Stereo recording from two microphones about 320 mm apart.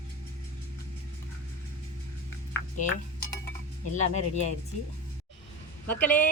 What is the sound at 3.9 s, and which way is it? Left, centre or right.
Speech, left.